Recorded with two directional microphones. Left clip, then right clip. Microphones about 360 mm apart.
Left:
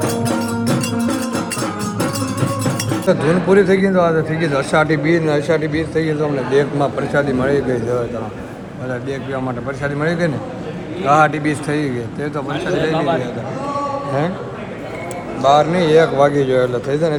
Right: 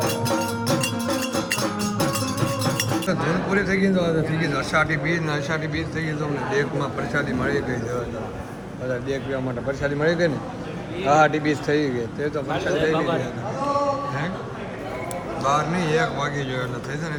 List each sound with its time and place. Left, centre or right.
0.3 s music: right
3.1 s a man's voice: centre
9.8 s a man's voice: centre
15.4 s a man's voice: centre